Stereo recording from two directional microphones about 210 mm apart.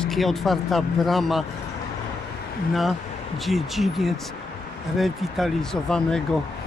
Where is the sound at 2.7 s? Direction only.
Centre (ahead or behind).